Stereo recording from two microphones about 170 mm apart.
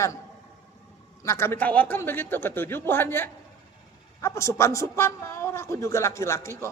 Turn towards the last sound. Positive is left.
turn(degrees=15)  # may be behind; listen again after turning